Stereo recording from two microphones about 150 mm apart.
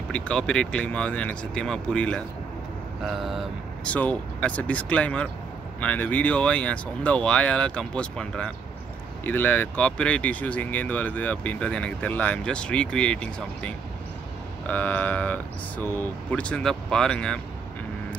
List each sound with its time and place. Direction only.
0.1 s speech: 5° left (ahead or behind)